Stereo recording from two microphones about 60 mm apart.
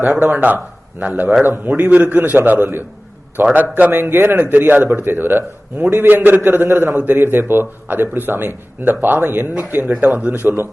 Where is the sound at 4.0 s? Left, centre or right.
Right.